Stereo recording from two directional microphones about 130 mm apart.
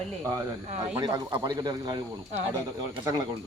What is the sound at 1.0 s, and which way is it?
Speech, 30° right (ahead or behind).